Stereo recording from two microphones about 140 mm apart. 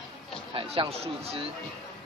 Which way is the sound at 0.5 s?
40° right (ahead or behind).